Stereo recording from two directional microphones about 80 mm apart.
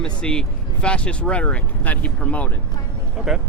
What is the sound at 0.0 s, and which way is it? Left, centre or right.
Speech, centre.